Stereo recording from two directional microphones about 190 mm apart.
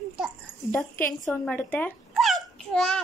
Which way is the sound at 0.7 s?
10° left (ahead or behind).